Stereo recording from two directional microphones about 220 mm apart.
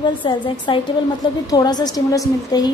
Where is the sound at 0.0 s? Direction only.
20° left (ahead or behind).